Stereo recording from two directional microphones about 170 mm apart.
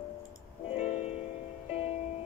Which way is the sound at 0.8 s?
40° left (ahead or behind).